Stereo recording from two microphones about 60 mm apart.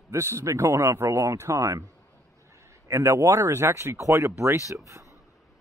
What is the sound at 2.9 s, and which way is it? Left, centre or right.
Speech, right.